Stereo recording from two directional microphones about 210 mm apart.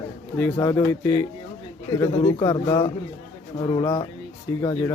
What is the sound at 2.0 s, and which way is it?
Speech, 20° left (ahead or behind).